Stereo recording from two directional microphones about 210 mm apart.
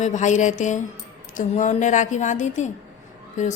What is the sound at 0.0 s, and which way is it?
A woman's voice, 35° left (ahead or behind).